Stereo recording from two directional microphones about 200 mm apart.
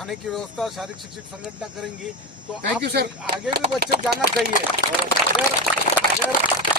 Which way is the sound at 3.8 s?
50° right (ahead or behind).